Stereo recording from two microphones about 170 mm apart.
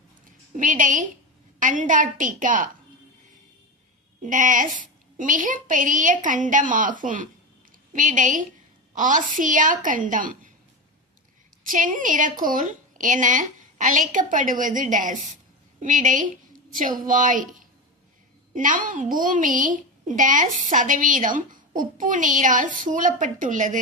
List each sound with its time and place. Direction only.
0.5 s a woman's voice: 50° right (ahead or behind)
4.2 s a woman's voice: 50° right (ahead or behind)
11.6 s a woman's voice: 50° right (ahead or behind)